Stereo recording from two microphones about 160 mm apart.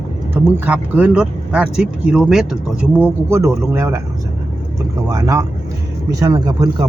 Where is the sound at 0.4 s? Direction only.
10° right (ahead or behind).